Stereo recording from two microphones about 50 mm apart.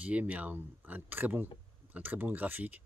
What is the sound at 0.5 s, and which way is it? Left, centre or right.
Speech, right.